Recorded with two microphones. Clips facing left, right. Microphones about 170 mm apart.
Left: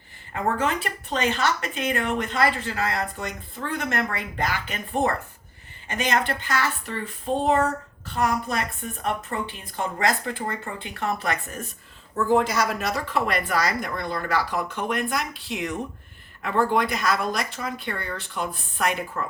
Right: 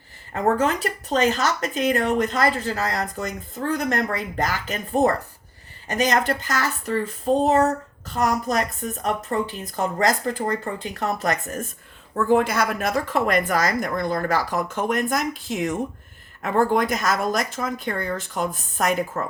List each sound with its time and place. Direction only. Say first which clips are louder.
0.4 s speech: right 4 dB; 40° right (ahead or behind)
12.1 s a woman's voice: right 2 dB; 55° right (ahead or behind)